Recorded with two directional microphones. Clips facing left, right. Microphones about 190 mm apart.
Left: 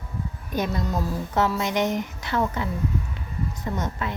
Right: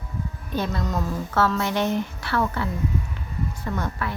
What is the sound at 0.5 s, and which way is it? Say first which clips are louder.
A woman's voice: even; 15° left (ahead or behind).